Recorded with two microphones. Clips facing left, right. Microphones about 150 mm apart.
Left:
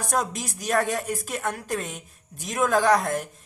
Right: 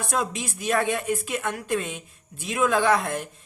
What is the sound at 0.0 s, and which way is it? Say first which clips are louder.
Speech: even; 40° left (ahead or behind).